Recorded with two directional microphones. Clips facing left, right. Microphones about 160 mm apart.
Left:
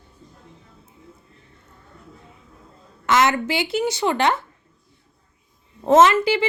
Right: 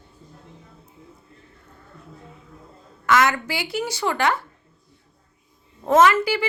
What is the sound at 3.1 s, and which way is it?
Speech, 20° left (ahead or behind).